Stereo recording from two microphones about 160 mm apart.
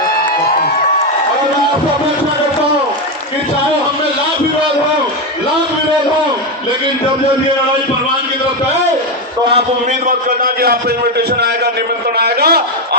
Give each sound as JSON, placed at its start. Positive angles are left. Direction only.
{"t": 10.1, "sound": "a man's voice", "side_deg": -65}
{"t": 12.1, "sound": "a man's voice", "side_deg": -80}